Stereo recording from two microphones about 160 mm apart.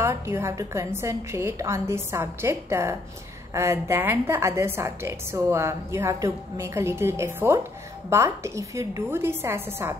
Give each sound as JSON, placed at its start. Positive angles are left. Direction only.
{"t": 0.0, "sound": "a woman's voice", "side_deg": -15}